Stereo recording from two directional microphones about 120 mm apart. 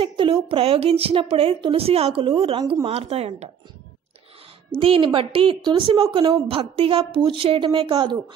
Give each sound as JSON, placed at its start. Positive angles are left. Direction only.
{"t": 0.0, "sound": "a woman's voice", "side_deg": -45}
{"t": 4.7, "sound": "a woman's voice", "side_deg": -50}
{"t": 6.4, "sound": "a woman's voice", "side_deg": -50}